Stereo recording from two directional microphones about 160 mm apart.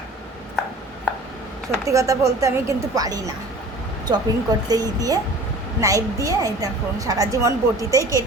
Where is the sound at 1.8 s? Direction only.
20° right (ahead or behind).